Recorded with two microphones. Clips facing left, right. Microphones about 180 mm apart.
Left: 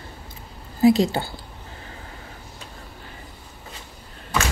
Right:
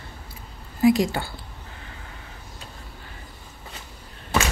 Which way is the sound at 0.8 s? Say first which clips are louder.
Left 2 dB; 30° left (ahead or behind).